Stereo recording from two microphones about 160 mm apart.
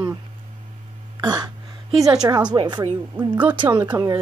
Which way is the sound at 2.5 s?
30° right (ahead or behind).